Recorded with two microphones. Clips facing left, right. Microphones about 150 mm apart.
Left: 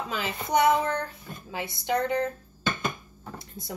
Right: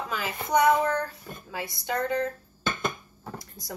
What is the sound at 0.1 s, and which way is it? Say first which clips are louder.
Speech: right 1 dB; 25° left (ahead or behind).